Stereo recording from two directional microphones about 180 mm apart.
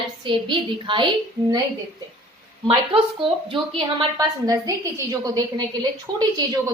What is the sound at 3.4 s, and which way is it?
A woman's voice, 30° right (ahead or behind).